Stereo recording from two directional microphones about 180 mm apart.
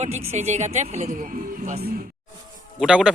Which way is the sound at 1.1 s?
50° right (ahead or behind).